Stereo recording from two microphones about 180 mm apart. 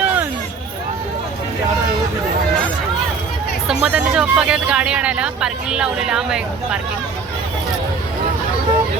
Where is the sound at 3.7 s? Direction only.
5° right (ahead or behind).